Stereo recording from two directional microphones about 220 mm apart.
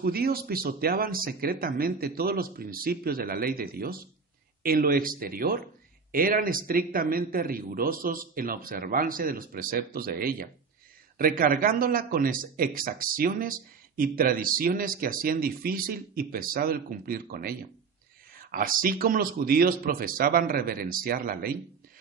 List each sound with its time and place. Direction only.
0.0 s speech: 45° right (ahead or behind)